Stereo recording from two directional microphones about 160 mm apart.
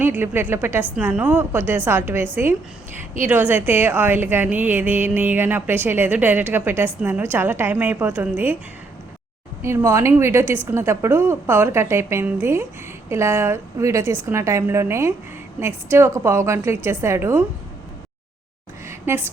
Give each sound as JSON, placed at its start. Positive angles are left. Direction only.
{"t": 0.0, "sound": "a woman's voice", "side_deg": -15}
{"t": 9.6, "sound": "a woman's voice", "side_deg": -15}
{"t": 18.9, "sound": "a sound", "side_deg": -15}